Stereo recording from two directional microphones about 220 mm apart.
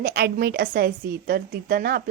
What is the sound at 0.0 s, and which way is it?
A woman's voice, 45° right (ahead or behind).